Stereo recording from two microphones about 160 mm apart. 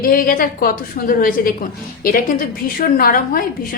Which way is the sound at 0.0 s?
65° left (ahead or behind).